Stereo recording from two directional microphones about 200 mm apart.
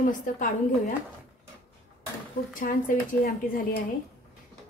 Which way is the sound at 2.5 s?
45° left (ahead or behind).